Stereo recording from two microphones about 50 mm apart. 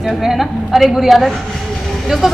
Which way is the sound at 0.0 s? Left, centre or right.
Centre.